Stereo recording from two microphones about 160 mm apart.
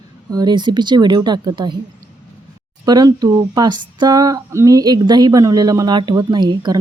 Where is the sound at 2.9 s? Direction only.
25° right (ahead or behind).